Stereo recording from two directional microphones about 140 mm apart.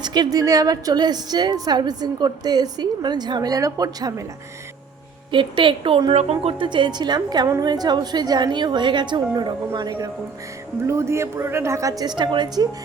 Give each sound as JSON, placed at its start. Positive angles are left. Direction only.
{"t": 0.0, "sound": "a woman's voice", "side_deg": -30}
{"t": 5.3, "sound": "a woman's voice", "side_deg": -35}